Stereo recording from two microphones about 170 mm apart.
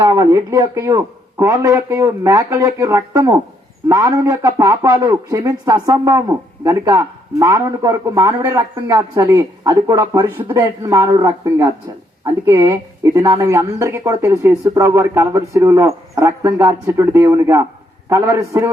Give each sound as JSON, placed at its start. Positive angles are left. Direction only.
{"t": 0.0, "sound": "a man's voice", "side_deg": -20}